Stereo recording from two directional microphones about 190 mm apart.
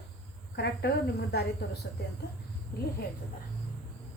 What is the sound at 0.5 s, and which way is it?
Speech, 60° left (ahead or behind).